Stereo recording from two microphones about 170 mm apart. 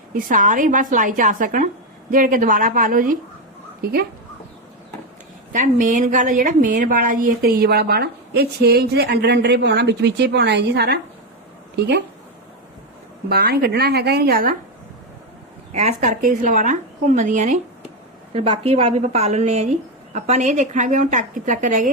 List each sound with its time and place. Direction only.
0.1 s a woman's voice: 50° right (ahead or behind)
5.5 s a woman's voice: 45° right (ahead or behind); by 11.0 s 75° right (ahead or behind)
11.8 s speech: 90° right
13.2 s speech: 65° right (ahead or behind)
15.7 s a woman's voice: 40° right (ahead or behind)
18.3 s a woman's voice: 35° right (ahead or behind); by 21.8 s 50° right (ahead or behind)